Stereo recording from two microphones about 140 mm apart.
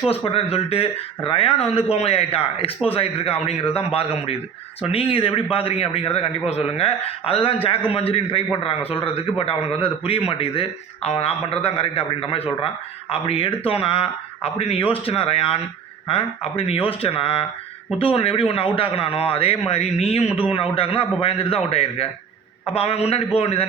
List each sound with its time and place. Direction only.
0.1 s a man's voice: 45° left (ahead or behind)